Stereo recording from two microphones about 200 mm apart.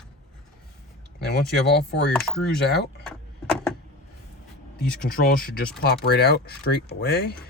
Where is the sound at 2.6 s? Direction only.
55° left (ahead or behind).